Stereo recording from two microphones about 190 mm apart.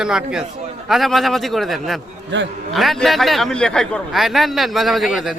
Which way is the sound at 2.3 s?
70° right (ahead or behind).